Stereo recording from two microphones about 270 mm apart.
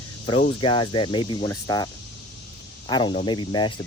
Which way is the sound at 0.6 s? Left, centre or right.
Centre.